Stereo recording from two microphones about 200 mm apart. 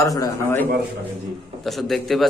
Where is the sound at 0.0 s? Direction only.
15° left (ahead or behind).